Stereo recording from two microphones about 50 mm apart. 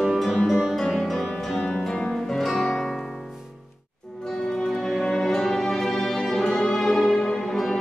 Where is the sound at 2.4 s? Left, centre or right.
Centre.